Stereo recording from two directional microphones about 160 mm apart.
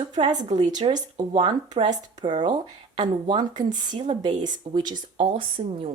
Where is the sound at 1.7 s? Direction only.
50° right (ahead or behind).